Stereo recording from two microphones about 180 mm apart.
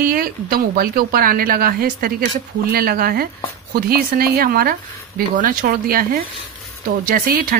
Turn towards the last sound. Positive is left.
turn(degrees=-55)  # may be behind; listen again after turning